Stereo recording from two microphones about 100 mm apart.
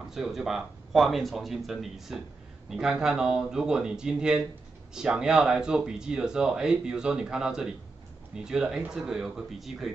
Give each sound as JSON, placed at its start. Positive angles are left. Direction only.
{"t": 0.1, "sound": "speech", "side_deg": 0}